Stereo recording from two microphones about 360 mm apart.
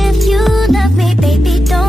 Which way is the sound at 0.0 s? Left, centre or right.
Centre.